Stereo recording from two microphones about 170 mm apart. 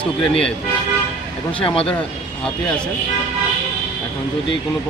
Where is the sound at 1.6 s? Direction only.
30° left (ahead or behind).